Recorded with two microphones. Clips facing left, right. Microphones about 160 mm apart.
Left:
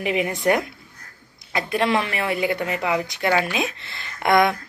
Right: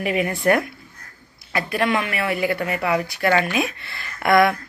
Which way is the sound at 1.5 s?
25° left (ahead or behind).